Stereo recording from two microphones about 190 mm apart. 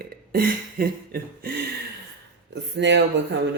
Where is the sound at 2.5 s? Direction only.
70° right (ahead or behind).